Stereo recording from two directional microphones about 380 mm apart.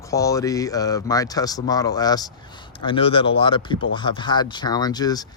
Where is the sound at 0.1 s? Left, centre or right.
Centre.